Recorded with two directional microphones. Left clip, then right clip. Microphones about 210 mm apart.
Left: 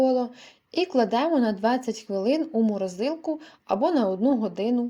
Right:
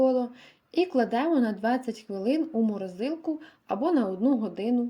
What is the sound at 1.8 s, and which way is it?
Speech, 65° left (ahead or behind).